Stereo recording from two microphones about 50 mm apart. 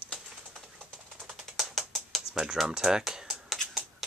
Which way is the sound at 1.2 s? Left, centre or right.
Centre.